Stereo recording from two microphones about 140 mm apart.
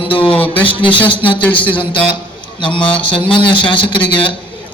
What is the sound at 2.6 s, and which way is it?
A man's voice, 35° left (ahead or behind).